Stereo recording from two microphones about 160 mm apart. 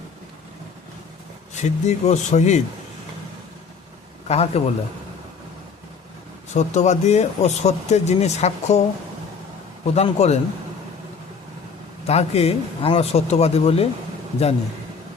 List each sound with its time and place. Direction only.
1.6 s speech: 45° left (ahead or behind)
4.3 s speech: 40° left (ahead or behind)
6.5 s speech: 45° left (ahead or behind)
9.8 s speech: 40° left (ahead or behind)
12.0 s speech: 40° left (ahead or behind)